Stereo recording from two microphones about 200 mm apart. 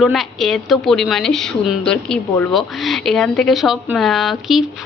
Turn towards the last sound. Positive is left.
turn(degrees=0)  # may be behind; listen again after turning